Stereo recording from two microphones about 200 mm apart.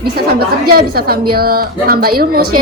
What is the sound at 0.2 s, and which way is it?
A woman's voice, 50° right (ahead or behind).